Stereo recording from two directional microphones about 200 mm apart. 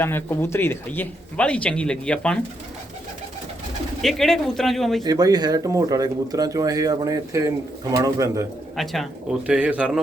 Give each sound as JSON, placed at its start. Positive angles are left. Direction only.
{"t": 0.0, "sound": "speech", "side_deg": 10}
{"t": 4.0, "sound": "speech", "side_deg": 0}
{"t": 5.0, "sound": "speech", "side_deg": -20}
{"t": 8.7, "sound": "speech", "side_deg": 0}